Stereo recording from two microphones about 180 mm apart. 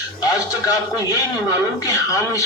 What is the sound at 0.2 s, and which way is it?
Speech, 20° left (ahead or behind).